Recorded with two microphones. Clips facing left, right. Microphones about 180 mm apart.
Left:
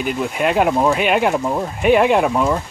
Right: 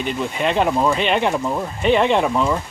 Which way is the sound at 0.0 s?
5° left (ahead or behind).